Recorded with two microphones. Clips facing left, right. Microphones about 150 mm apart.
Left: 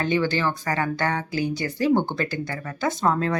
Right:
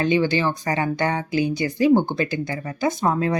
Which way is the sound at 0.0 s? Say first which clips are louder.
Right 3 dB; 15° right (ahead or behind).